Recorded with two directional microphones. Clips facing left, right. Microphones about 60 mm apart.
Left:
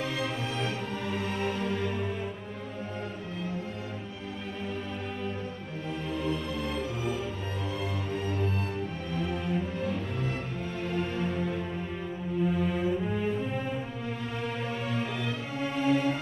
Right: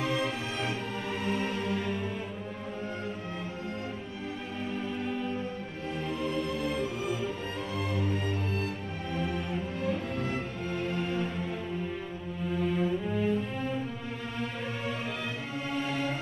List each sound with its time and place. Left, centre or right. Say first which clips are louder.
0.0 s music: right 1 dB; right
1.1 s music: right 1 dB; centre
6.0 s music: even; centre
11.0 s music: left 1 dB; centre
15.8 s music: left 8 dB; centre